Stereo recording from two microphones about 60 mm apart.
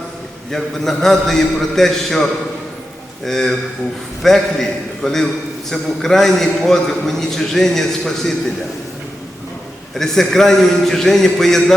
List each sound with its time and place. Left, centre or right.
0.5 s a man's voice: centre
3.2 s a man's voice: centre
9.9 s a man's voice: centre